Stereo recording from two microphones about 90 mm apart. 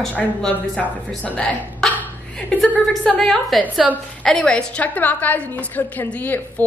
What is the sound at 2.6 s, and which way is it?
A woman's voice, 5° left (ahead or behind).